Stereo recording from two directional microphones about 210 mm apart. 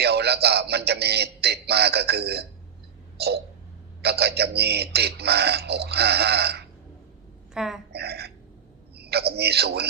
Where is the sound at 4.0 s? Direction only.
50° right (ahead or behind).